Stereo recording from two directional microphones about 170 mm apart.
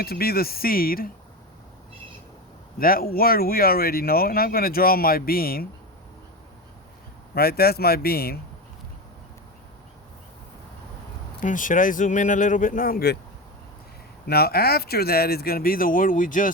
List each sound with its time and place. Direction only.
0.0 s speech: 65° left (ahead or behind)
2.7 s speech: 60° left (ahead or behind)
7.3 s speech: 65° left (ahead or behind)
11.3 s speech: 50° left (ahead or behind)
14.3 s speech: 65° left (ahead or behind); by 16.5 s 50° left (ahead or behind)